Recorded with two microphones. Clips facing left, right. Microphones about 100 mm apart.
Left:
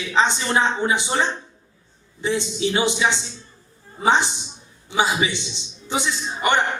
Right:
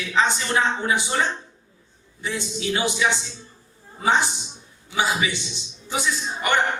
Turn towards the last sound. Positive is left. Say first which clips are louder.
# left 2 dB
turn(degrees=25)  # may be behind; listen again after turning